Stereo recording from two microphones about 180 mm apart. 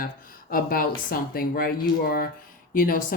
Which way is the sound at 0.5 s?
55° left (ahead or behind).